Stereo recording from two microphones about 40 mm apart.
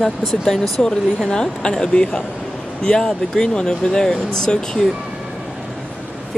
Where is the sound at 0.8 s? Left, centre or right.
Centre.